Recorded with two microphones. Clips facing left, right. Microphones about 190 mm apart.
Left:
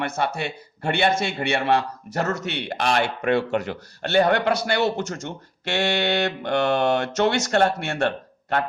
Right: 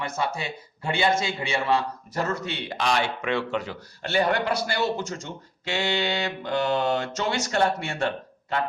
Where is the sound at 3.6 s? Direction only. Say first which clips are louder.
Left 5 dB; 65° left (ahead or behind).